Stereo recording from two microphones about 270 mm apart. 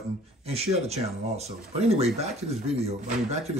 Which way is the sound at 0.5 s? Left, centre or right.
Right.